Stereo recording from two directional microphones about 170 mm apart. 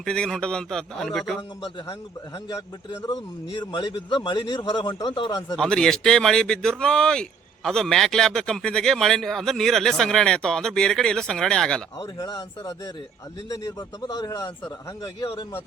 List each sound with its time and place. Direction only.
0.0 s speech: 5° left (ahead or behind)
1.4 s speech: 20° left (ahead or behind)
3.1 s speech: 25° left (ahead or behind)
5.5 s speech: 5° left (ahead or behind)
11.9 s speech: 25° left (ahead or behind)